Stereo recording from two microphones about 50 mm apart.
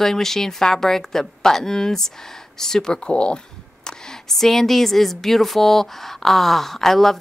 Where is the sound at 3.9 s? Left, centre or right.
Centre.